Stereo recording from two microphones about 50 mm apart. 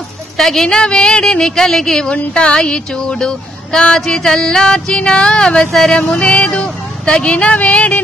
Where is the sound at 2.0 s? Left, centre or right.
Centre.